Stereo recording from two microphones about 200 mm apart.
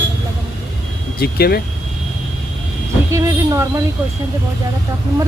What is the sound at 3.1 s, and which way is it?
Speech, 15° right (ahead or behind).